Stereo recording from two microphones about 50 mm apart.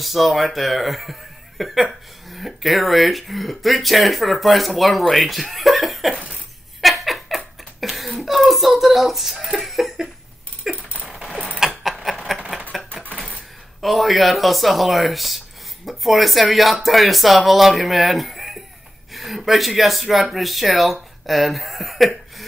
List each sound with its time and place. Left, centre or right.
0.0 s speech: centre
6.1 s a sound: right
6.8 s giggle: centre
10.6 s a sound: centre
11.8 s mechanisms: centre
13.7 s speech: centre